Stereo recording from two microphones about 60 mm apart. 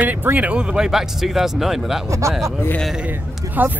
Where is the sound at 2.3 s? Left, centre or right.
Centre.